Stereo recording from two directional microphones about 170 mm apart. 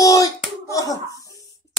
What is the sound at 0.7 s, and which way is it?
Slap, 20° left (ahead or behind).